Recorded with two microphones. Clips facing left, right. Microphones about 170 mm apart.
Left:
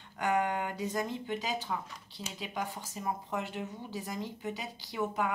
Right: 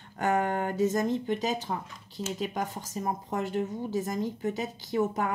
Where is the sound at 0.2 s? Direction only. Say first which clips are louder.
Right 3 dB; 45° right (ahead or behind).